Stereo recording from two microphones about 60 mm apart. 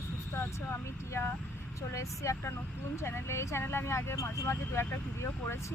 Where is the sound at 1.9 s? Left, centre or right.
Left.